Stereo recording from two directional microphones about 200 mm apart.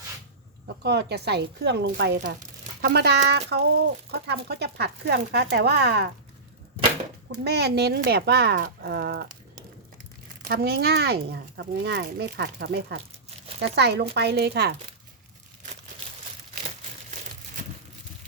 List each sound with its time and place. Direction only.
0.8 s speech: 55° right (ahead or behind)
7.3 s speech: 55° right (ahead or behind)
10.5 s speech: 50° right (ahead or behind)